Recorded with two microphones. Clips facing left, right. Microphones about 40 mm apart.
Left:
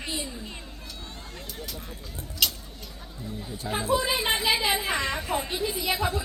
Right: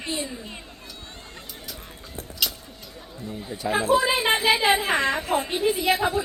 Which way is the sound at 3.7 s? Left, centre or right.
Right.